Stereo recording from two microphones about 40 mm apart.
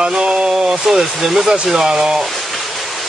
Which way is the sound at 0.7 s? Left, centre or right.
Centre.